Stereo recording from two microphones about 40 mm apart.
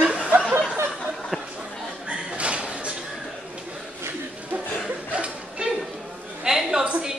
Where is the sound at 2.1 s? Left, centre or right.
Right.